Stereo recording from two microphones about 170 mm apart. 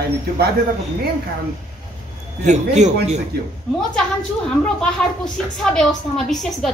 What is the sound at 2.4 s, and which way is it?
Speech, 45° right (ahead or behind).